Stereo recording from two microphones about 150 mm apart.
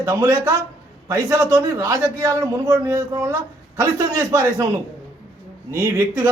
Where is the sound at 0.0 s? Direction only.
20° right (ahead or behind).